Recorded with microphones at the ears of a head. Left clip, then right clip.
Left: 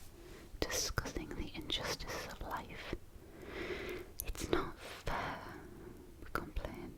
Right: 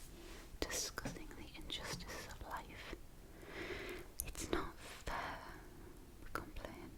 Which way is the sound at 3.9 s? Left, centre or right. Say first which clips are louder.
Left 4 dB; left.